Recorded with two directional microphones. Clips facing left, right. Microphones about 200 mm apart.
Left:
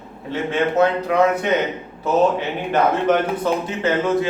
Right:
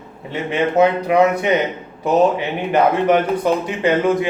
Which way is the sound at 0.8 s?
15° right (ahead or behind).